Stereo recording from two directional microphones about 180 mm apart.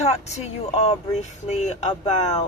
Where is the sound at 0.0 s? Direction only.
40° left (ahead or behind).